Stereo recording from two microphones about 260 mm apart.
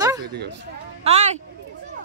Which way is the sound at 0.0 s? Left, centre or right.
Centre.